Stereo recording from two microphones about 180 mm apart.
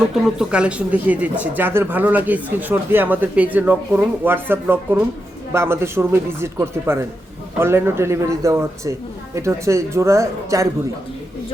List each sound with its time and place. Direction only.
0.3 s speech: 5° right (ahead or behind)